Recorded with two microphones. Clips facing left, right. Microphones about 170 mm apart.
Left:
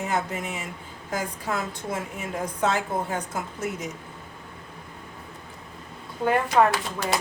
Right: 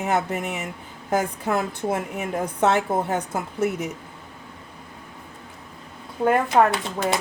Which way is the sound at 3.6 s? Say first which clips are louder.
Right 9 dB; 60° right (ahead or behind).